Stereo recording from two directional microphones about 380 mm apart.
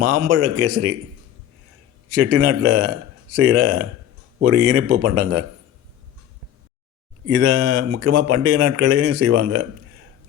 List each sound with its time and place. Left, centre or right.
0.0 s speech: right
2.0 s speech: right
7.3 s speech: right